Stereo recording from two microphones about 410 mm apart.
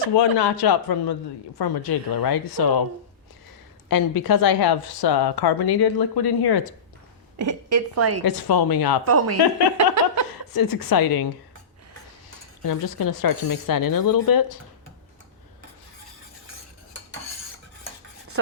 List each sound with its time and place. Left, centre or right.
0.1 s a man's voice: left
3.8 s a woman's voice: left
7.3 s a woman's voice: right
8.2 s a woman's voice: left
9.0 s a woman's voice: right
9.7 s a sound: right
10.5 s speech: left
12.6 s speech: left